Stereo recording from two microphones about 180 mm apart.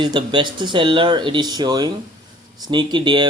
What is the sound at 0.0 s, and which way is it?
Speech, 25° right (ahead or behind).